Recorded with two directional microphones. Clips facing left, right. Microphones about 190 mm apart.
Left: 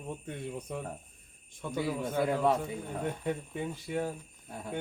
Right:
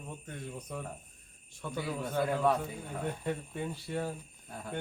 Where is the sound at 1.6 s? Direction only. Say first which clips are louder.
Left 3 dB; 20° left (ahead or behind).